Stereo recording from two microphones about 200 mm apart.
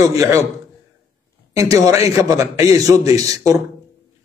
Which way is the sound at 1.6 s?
15° right (ahead or behind).